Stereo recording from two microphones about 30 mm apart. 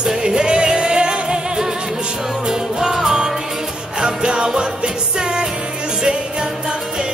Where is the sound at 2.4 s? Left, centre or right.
Centre.